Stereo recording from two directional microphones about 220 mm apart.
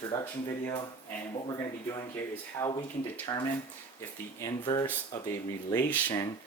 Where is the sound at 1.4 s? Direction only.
20° left (ahead or behind).